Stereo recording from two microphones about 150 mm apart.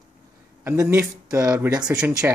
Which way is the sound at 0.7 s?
15° right (ahead or behind).